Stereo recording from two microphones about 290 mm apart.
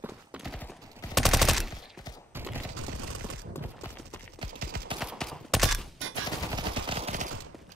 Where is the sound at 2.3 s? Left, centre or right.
Centre.